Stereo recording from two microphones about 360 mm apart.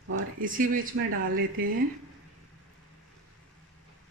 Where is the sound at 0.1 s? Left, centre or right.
Right.